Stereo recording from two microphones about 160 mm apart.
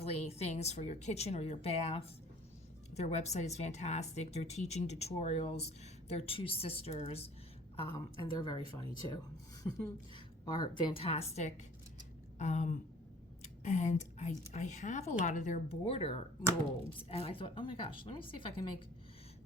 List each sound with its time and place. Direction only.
0.0 s speech: 40° left (ahead or behind); by 8.5 s 25° left (ahead or behind)
8.5 s speech: 35° right (ahead or behind)
9.6 s speech: 30° left (ahead or behind)